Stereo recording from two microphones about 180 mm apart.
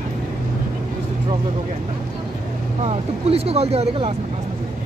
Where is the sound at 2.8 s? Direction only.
35° right (ahead or behind).